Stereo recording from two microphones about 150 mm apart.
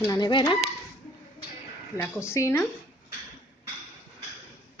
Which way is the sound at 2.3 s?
15° left (ahead or behind).